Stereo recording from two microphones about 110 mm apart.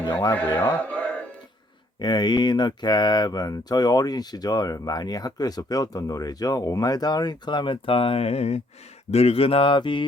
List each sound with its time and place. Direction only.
0.3 s speech: 15° left (ahead or behind)
2.0 s speech: 40° left (ahead or behind)